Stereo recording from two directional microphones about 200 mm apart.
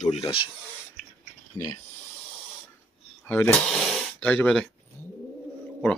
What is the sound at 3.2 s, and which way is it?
Speech, 10° left (ahead or behind).